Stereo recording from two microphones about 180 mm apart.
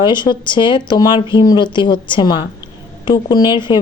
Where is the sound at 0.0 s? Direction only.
25° left (ahead or behind).